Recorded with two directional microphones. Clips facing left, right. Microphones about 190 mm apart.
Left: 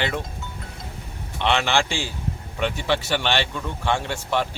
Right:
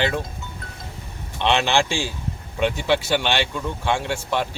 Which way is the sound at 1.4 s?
15° right (ahead or behind).